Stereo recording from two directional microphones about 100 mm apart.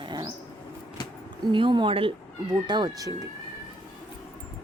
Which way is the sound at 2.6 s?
45° right (ahead or behind).